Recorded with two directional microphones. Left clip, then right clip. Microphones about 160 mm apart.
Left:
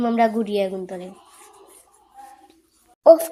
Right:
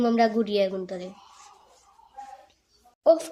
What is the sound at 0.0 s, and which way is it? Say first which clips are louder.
A child's voice: left 3 dB; 10° left (ahead or behind).